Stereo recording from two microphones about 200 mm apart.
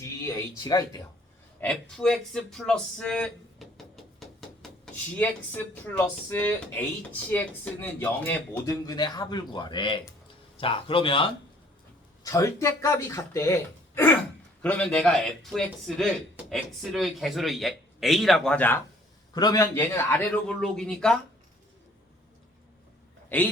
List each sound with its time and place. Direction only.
0.0 s speech: 15° left (ahead or behind)
1.6 s speech: 5° left (ahead or behind)
5.1 s speech: 10° left (ahead or behind); by 11.3 s 25° left (ahead or behind)
12.2 s speech: 15° left (ahead or behind)
19.3 s speech: 20° left (ahead or behind); by 21.2 s 5° left (ahead or behind)
23.3 s speech: 10° left (ahead or behind)